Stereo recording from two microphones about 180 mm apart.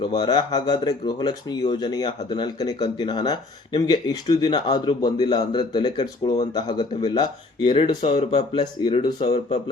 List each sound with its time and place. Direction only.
0.0 s speech: 25° left (ahead or behind)